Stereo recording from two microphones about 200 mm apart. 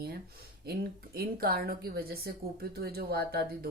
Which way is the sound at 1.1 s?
50° right (ahead or behind).